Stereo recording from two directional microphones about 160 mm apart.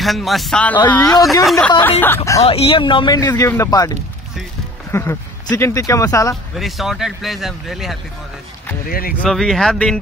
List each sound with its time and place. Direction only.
0.0 s speech: centre (ahead or behind)
1.4 s speech: centre (ahead or behind)
1.8 s speech: 10° left (ahead or behind)
2.4 s speech: 35° left (ahead or behind); by 3.9 s 20° left (ahead or behind)
4.9 s speech: 15° left (ahead or behind)
6.5 s speech: centre (ahead or behind)
8.8 s speech: 65° left (ahead or behind)
9.2 s speech: centre (ahead or behind)